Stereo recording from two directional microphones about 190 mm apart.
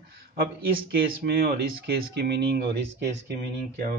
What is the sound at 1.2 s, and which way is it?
A man's voice, 60° right (ahead or behind).